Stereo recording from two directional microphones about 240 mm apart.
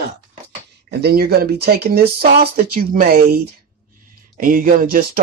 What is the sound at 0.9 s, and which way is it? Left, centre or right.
Speech, right.